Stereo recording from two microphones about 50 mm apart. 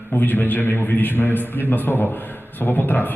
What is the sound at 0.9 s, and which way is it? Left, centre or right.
A man's voice, left.